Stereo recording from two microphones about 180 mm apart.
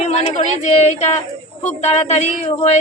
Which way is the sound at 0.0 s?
40° left (ahead or behind).